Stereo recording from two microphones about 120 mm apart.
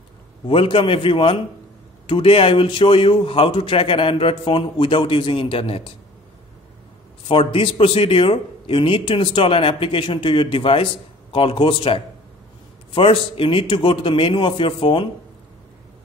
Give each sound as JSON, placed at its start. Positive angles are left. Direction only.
{"t": 0.5, "sound": "a man's voice", "side_deg": 45}
{"t": 7.2, "sound": "a man's voice", "side_deg": 50}